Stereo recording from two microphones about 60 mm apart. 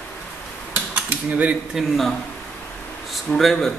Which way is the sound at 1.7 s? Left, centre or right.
Centre.